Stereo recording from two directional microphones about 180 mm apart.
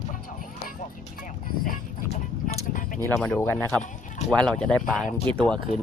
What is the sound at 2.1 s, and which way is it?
Vehicle, 35° left (ahead or behind).